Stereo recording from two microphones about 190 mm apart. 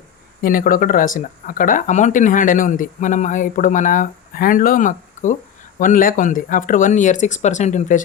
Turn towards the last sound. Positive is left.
turn(degrees=40)  # may be behind; listen again after turning